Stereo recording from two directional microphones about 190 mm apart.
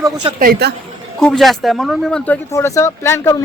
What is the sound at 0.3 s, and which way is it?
Speech, 50° right (ahead or behind).